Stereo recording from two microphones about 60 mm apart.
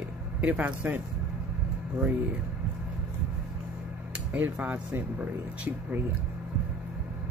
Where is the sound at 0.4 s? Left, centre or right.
Right.